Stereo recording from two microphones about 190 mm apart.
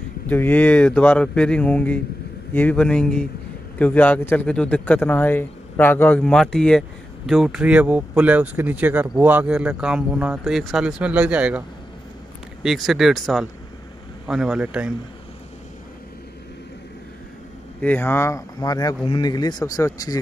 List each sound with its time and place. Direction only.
0.3 s a man's voice: 10° left (ahead or behind); by 11.6 s 5° right (ahead or behind)
12.6 s speech: centre (ahead or behind)
17.7 s speech: 10° left (ahead or behind)